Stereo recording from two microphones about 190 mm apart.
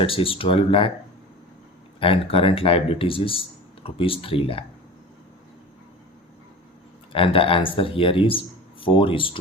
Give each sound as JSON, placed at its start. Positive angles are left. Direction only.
{"t": 0.0, "sound": "speech", "side_deg": 30}
{"t": 2.0, "sound": "speech", "side_deg": 30}
{"t": 7.1, "sound": "speech", "side_deg": 30}